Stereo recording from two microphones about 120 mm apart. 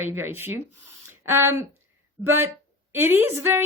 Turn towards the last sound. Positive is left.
turn(degrees=-20)  # may be behind; listen again after turning